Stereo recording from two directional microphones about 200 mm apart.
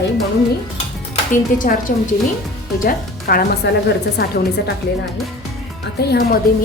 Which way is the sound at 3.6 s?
60° left (ahead or behind).